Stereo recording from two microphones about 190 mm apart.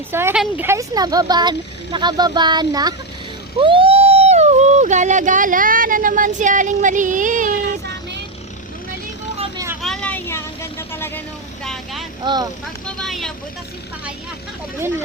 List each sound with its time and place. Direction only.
0.1 s speech: 10° right (ahead or behind); by 7.6 s 45° right (ahead or behind)
9.8 s vehicle: 5° left (ahead or behind)
12.2 s speech: 25° right (ahead or behind)
13.0 s vehicle: centre (ahead or behind)
14.8 s speech: 10° right (ahead or behind)